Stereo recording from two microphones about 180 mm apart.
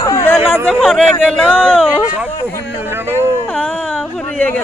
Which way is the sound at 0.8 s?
Centre (ahead or behind).